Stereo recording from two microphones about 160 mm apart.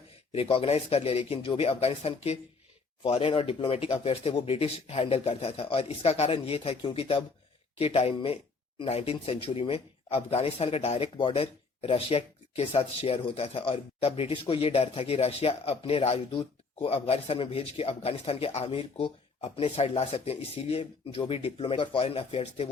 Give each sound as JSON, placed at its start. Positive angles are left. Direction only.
{"t": 0.3, "sound": "speech", "side_deg": 35}